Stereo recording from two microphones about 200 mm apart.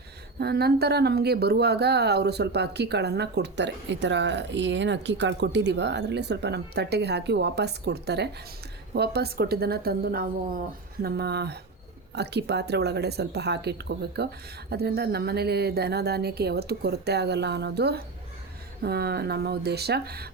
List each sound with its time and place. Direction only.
0.3 s speech: 55° right (ahead or behind)